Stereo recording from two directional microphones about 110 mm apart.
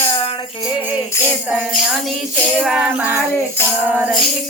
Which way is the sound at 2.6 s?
10° right (ahead or behind).